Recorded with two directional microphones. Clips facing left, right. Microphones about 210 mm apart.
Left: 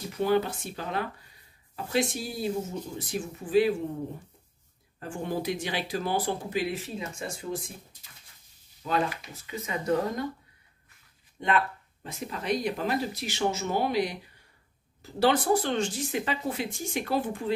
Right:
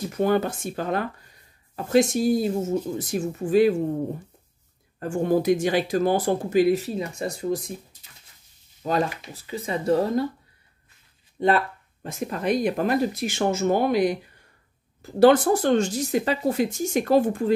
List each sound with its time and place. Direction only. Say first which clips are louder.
0.2 s speech: right 3 dB; 50° right (ahead or behind)
5.0 s speech: right 10 dB; 45° right (ahead or behind)
8.8 s speech: right 4 dB; 35° right (ahead or behind)
11.3 s speech: right 6 dB; 35° right (ahead or behind)